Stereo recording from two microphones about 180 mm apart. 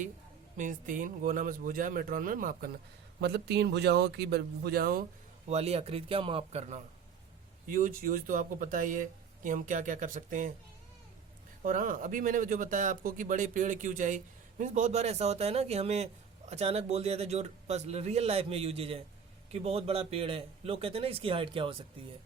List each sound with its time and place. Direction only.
0.5 s speech: 45° right (ahead or behind)
3.2 s speech: 65° right (ahead or behind)
5.5 s a man's voice: 35° right (ahead or behind)
7.7 s speech: 50° right (ahead or behind)
11.6 s a man's voice: 50° right (ahead or behind); by 21.8 s 30° right (ahead or behind)